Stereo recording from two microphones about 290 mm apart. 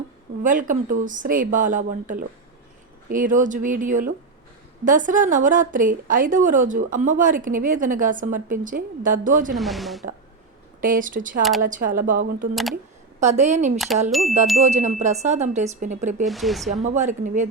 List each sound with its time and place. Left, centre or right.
0.4 s a woman's voice: right
9.6 s speech: centre
10.8 s a woman's voice: right
13.7 s speech: centre
14.6 s a woman's voice: right
16.2 s speech: centre
16.8 s a woman's voice: right